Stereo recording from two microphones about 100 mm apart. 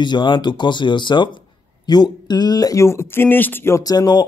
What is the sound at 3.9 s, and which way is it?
Speech, 40° left (ahead or behind).